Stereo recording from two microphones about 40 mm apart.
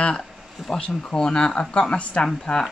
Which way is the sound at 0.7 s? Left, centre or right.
Left.